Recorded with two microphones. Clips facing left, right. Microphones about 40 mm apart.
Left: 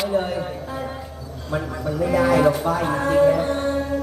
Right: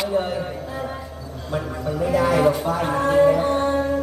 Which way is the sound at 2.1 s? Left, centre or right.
Centre.